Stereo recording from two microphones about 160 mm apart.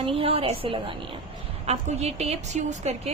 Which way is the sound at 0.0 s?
35° right (ahead or behind).